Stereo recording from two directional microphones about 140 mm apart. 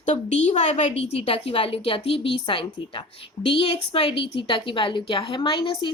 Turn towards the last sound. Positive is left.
turn(degrees=40)  # may be behind; listen again after turning